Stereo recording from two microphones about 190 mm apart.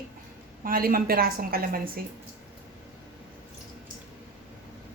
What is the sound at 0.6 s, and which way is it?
A woman's voice, 50° right (ahead or behind).